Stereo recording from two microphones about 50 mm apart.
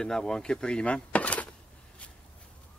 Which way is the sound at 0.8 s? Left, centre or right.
Left.